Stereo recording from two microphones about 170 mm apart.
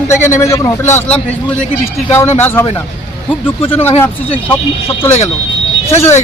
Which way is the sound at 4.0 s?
10° left (ahead or behind).